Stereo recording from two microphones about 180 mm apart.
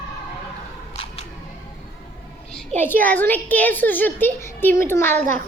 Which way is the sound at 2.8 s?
10° left (ahead or behind).